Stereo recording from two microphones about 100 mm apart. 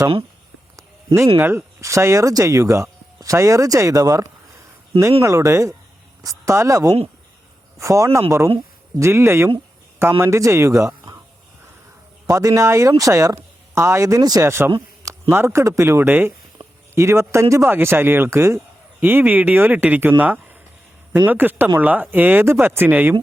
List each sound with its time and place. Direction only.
0.8 s a sound: 30° right (ahead or behind)
1.4 s speech: 25° right (ahead or behind)
12.2 s speech: 35° right (ahead or behind)
14.4 s speech: 25° right (ahead or behind)